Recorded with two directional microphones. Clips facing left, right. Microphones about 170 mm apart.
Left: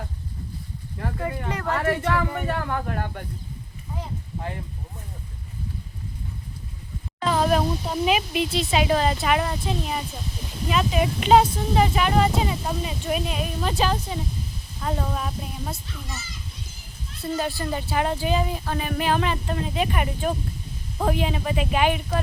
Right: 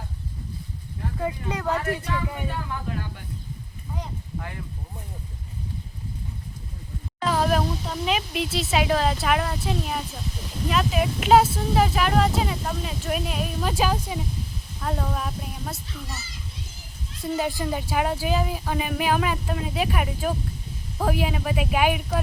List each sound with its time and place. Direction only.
1.0 s speech: 75° left (ahead or behind); by 3.2 s 55° left (ahead or behind)
7.3 s a sound: centre (ahead or behind)
7.9 s speech: 10° left (ahead or behind)
17.2 s speech: 10° right (ahead or behind)